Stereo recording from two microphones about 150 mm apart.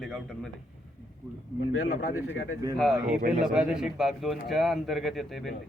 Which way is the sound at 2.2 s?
20° right (ahead or behind).